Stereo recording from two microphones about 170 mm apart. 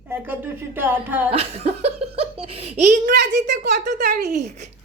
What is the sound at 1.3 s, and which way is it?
Speech, 35° right (ahead or behind).